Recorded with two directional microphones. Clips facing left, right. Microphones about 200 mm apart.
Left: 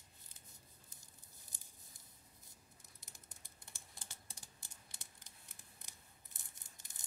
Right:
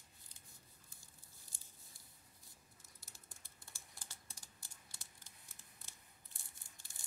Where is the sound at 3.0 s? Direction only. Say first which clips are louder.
Even; 20° left (ahead or behind).